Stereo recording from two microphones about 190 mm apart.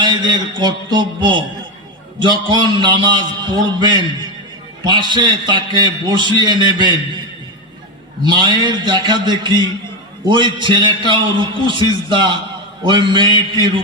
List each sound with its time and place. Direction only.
0.0 s a man's voice: 25° right (ahead or behind)
8.2 s a man's voice: 25° right (ahead or behind)